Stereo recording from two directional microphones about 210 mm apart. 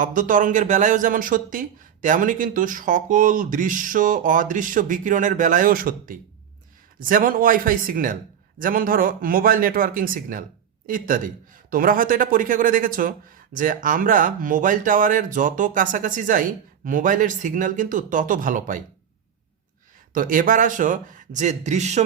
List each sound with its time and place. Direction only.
0.0 s a man's voice: 40° right (ahead or behind)
20.1 s a man's voice: 40° right (ahead or behind)